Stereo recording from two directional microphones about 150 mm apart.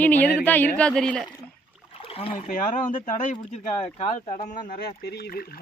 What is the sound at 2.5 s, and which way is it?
Speech, 60° left (ahead or behind).